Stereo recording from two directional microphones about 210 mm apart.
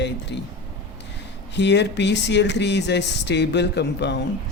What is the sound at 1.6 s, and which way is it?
A man's voice, 55° left (ahead or behind).